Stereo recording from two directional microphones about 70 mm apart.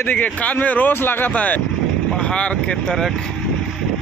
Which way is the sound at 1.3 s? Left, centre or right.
Left.